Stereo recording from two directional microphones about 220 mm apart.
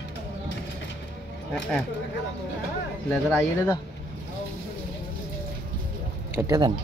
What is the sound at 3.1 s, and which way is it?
Speech, 5° left (ahead or behind).